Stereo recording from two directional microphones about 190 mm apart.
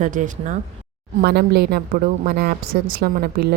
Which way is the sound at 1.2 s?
55° right (ahead or behind).